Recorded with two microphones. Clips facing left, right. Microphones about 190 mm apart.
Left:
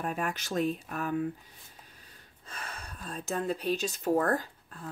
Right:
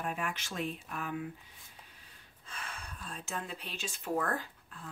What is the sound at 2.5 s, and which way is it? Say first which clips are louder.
Speech: left 3 dB; 40° left (ahead or behind).